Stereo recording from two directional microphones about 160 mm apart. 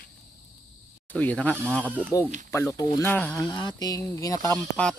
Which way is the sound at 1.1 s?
10° left (ahead or behind).